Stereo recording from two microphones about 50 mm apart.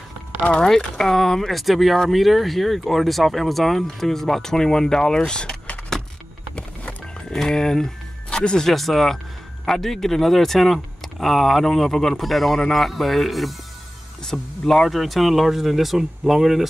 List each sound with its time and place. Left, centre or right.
0.4 s speech: centre
0.7 s speech: centre
6.5 s music: left
7.2 s speech: centre